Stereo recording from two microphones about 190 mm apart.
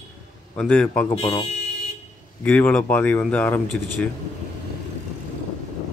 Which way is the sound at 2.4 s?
5° left (ahead or behind).